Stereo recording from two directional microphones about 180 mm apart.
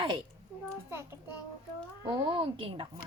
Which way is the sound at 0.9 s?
15° right (ahead or behind).